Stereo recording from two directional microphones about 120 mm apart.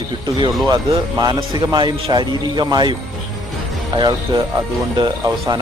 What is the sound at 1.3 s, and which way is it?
Speech, 45° right (ahead or behind).